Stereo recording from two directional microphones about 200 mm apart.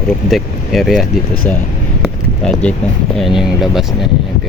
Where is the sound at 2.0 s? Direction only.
5° left (ahead or behind).